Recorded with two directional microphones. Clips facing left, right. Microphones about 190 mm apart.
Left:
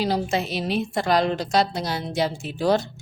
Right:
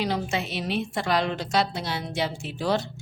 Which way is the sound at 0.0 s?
35° left (ahead or behind).